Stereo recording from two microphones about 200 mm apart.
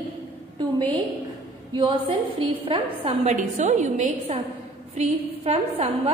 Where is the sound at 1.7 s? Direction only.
25° right (ahead or behind).